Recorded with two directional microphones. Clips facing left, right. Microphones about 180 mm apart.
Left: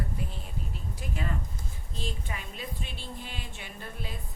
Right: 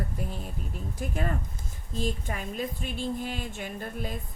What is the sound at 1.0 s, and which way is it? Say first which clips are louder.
A woman's voice: right 4 dB; 45° right (ahead or behind).